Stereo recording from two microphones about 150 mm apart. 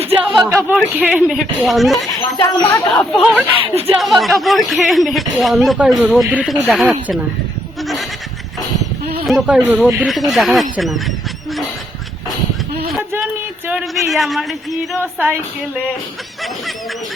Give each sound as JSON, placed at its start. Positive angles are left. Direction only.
{"t": 0.3, "sound": "speech", "side_deg": 0}
{"t": 2.4, "sound": "speech", "side_deg": 20}
{"t": 2.9, "sound": "speech", "side_deg": 5}
{"t": 3.6, "sound": "speech", "side_deg": -40}
{"t": 4.0, "sound": "speech", "side_deg": 0}
{"t": 9.2, "sound": "speech", "side_deg": -5}
{"t": 13.7, "sound": "speech", "side_deg": -5}